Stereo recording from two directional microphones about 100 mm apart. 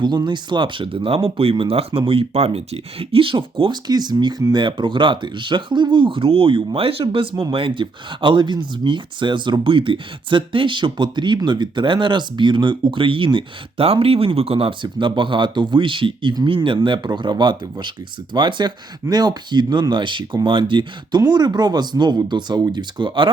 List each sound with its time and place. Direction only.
0.3 s speech: 55° right (ahead or behind); by 2.6 s 85° right
3.0 s speech: 65° right (ahead or behind)
21.2 s speech: 45° right (ahead or behind)